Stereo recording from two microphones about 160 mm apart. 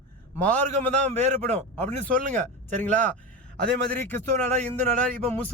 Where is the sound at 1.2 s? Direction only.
45° right (ahead or behind).